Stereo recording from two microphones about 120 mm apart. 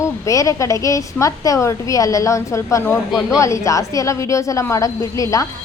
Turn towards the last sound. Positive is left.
turn(degrees=25)  # may be behind; listen again after turning